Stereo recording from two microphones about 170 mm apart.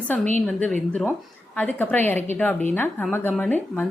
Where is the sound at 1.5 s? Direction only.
10° left (ahead or behind).